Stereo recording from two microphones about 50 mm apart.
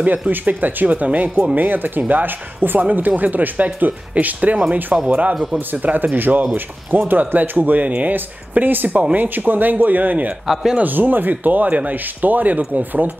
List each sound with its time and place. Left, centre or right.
0.3 s speech: right
5.3 s speech: centre
5.7 s speech: right
10.4 s speech: centre
10.8 s speech: right